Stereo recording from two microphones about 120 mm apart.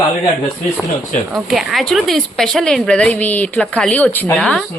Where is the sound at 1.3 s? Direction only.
Centre (ahead or behind).